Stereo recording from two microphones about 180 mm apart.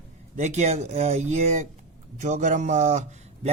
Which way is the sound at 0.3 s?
40° right (ahead or behind).